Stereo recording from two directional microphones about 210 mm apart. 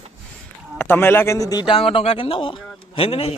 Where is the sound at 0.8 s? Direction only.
10° left (ahead or behind).